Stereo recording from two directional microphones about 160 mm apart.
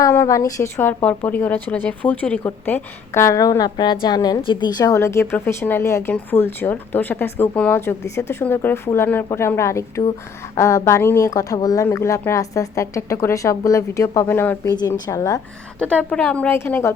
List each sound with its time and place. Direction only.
0.0 s a woman's voice: 20° left (ahead or behind)
14.7 s speech: 25° left (ahead or behind)
15.8 s a woman's voice: 5° left (ahead or behind)